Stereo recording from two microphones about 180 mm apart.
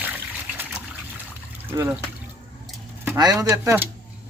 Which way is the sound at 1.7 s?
10° right (ahead or behind).